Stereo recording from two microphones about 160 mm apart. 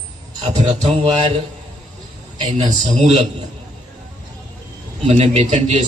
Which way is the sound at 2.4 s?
45° right (ahead or behind).